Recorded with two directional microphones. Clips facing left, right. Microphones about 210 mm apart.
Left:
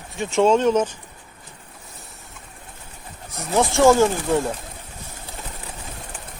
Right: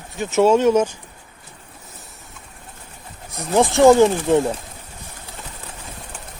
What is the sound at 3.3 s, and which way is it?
Speech, 15° right (ahead or behind).